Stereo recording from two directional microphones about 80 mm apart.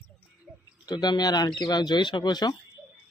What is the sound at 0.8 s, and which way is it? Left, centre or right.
Speech, left.